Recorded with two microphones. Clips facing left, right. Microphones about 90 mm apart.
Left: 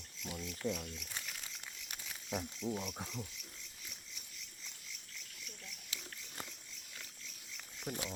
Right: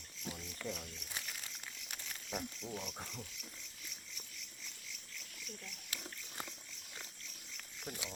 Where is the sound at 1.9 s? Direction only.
5° left (ahead or behind).